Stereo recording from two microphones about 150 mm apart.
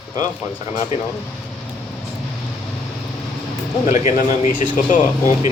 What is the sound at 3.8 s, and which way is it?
Speech, 50° left (ahead or behind).